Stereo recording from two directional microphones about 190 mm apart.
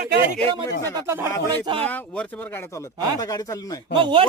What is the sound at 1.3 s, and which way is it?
Speech, 10° left (ahead or behind).